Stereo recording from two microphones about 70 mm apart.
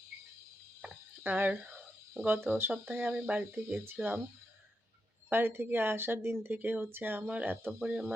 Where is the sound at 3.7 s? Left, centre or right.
Right.